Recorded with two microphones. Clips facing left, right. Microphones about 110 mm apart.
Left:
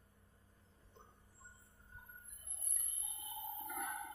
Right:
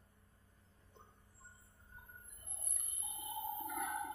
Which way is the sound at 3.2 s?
15° right (ahead or behind).